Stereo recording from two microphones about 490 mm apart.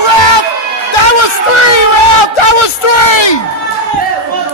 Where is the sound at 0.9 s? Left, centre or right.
Left.